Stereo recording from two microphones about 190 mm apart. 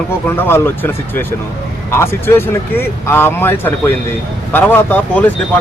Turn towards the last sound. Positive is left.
turn(degrees=10)  # may be behind; listen again after turning